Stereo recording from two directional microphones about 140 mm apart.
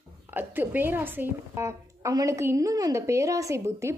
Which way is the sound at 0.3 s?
15° right (ahead or behind).